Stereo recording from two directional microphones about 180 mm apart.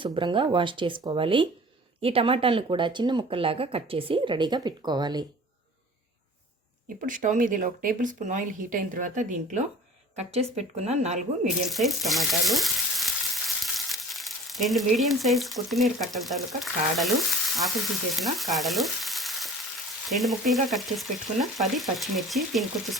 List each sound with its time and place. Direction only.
0.0 s speech: 25° right (ahead or behind)
6.8 s speech: 45° right (ahead or behind)
11.4 s speech: centre (ahead or behind)
20.1 s frying: centre (ahead or behind)